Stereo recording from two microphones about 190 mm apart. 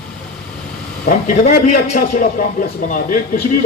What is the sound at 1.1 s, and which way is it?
A man's voice, 45° left (ahead or behind).